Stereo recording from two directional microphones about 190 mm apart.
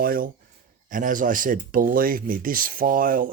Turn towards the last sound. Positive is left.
turn(degrees=-45)  # may be behind; listen again after turning